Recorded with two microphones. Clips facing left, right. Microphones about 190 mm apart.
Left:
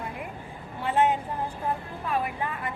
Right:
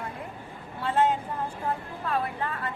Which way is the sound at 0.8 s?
15° left (ahead or behind).